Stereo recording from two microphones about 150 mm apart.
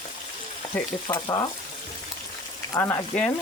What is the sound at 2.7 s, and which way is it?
Speech, 15° left (ahead or behind).